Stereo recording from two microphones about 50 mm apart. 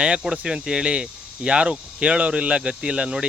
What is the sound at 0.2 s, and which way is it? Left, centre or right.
Speech, centre.